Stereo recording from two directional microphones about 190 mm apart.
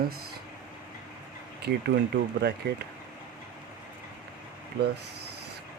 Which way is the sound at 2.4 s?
65° right (ahead or behind).